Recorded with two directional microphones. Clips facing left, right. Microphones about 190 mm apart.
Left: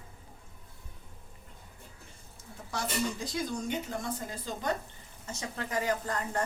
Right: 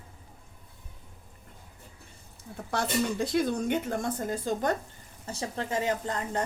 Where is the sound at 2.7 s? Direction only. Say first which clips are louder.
Right 5 dB; 60° right (ahead or behind).